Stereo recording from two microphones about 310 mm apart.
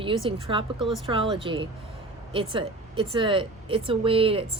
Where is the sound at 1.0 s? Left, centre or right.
Centre.